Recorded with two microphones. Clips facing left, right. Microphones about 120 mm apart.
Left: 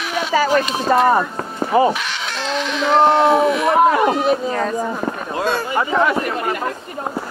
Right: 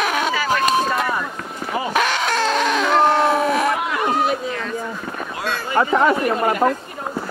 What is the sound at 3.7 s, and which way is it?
Speech, 40° left (ahead or behind).